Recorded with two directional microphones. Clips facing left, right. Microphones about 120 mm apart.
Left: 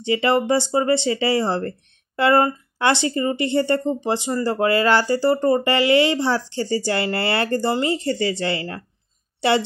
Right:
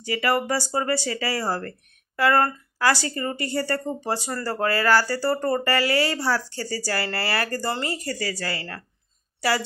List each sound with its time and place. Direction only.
0.0 s a woman's voice: 25° left (ahead or behind)